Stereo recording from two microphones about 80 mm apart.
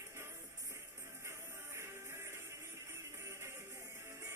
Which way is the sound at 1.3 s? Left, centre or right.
Right.